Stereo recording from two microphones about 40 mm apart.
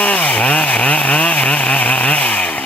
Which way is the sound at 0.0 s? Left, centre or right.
Left.